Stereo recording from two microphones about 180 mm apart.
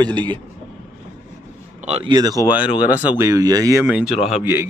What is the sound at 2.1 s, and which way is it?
Speech, 20° right (ahead or behind).